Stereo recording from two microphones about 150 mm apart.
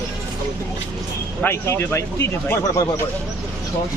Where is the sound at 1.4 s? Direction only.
15° left (ahead or behind).